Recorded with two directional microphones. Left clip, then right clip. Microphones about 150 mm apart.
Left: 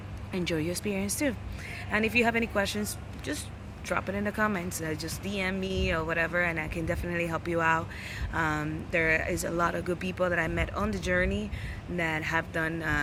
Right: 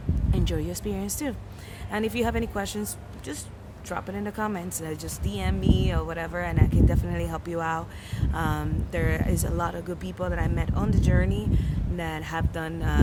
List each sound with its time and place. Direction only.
0.3 s speech: 25° right (ahead or behind)
11.3 s speech: 30° right (ahead or behind)